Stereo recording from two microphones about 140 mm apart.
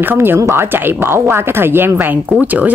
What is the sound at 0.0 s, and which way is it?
Speech, 15° right (ahead or behind).